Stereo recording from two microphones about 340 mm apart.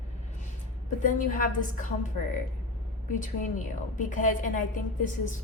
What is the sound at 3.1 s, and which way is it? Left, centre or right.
A woman's voice, left.